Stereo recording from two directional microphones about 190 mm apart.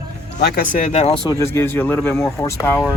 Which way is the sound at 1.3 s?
15° left (ahead or behind).